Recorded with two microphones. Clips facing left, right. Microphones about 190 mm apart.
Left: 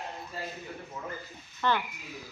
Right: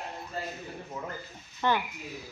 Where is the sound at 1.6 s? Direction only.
15° right (ahead or behind).